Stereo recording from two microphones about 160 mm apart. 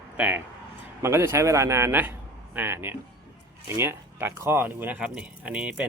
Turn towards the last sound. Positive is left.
turn(degrees=-5)  # may be behind; listen again after turning